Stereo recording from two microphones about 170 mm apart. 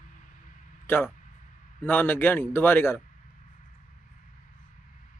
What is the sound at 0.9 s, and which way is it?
A man's voice, 10° left (ahead or behind).